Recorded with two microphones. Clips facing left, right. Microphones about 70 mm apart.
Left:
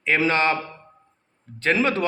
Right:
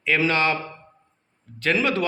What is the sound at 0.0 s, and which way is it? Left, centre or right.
Speech, left.